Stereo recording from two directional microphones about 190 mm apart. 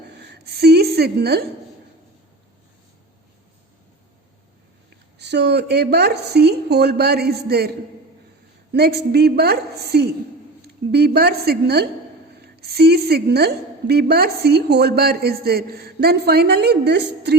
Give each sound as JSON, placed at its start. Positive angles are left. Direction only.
{"t": 0.1, "sound": "a sound", "side_deg": -60}
{"t": 5.1, "sound": "a woman's voice", "side_deg": -60}
{"t": 8.7, "sound": "a woman's voice", "side_deg": -60}